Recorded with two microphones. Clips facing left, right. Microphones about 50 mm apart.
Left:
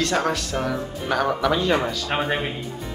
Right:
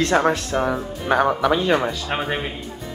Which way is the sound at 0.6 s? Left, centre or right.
Centre.